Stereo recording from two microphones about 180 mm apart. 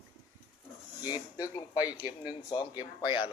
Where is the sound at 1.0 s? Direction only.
20° left (ahead or behind).